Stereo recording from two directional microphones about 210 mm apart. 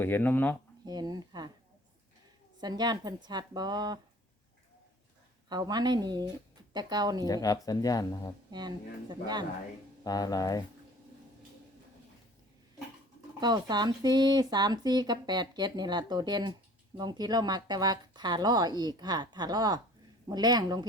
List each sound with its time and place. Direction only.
0.0 s speech: 10° left (ahead or behind)
0.9 s speech: 20° right (ahead or behind)
2.6 s speech: 20° right (ahead or behind)
5.5 s speech: 20° right (ahead or behind)
7.3 s speech: 15° left (ahead or behind)
8.4 s speech: 20° right (ahead or behind)
10.0 s speech: 20° left (ahead or behind)
13.4 s speech: 20° right (ahead or behind)